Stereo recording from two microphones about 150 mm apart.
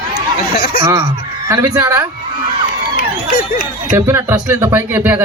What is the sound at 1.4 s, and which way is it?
Speech, 15° right (ahead or behind).